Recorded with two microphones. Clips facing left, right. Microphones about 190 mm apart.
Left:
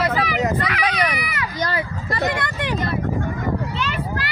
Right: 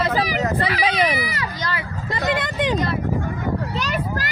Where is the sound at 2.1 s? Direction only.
20° right (ahead or behind).